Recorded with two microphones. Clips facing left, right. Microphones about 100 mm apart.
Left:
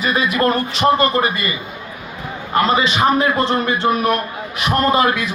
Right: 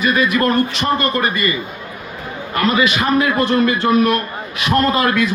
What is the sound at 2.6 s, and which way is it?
A man's voice, 25° left (ahead or behind).